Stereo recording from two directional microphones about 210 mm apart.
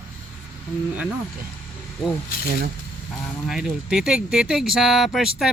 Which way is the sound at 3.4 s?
5° right (ahead or behind).